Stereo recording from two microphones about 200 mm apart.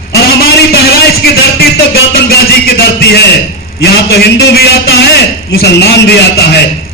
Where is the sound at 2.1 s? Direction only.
50° left (ahead or behind).